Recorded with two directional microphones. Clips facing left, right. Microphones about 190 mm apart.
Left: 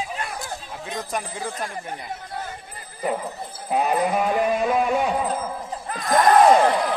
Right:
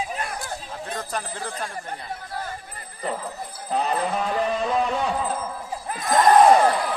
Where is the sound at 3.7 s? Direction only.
10° left (ahead or behind).